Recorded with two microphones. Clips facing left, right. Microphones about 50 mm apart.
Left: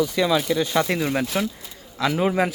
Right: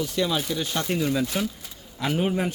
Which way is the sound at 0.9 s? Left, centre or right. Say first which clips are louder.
Left 2 dB; left.